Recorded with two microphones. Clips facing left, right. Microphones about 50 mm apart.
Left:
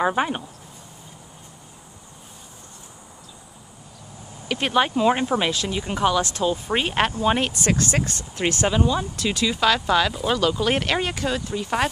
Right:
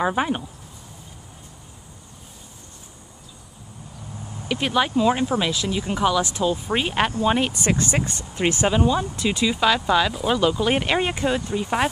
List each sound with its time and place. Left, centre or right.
0.0 s speech: centre
4.6 s speech: centre
5.5 s speech: centre
7.5 s speech: centre